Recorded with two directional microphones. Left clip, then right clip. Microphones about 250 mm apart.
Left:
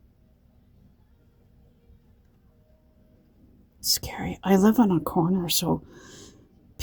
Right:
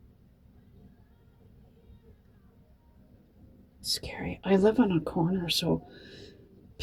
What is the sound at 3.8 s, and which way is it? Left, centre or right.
A woman's voice, left.